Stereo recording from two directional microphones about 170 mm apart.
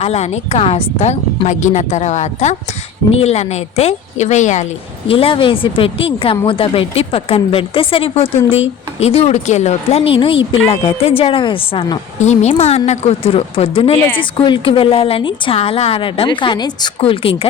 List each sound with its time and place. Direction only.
0.0 s a woman's voice: 40° left (ahead or behind)
5.0 s a woman's voice: 35° left (ahead or behind)
12.2 s a woman's voice: 40° left (ahead or behind)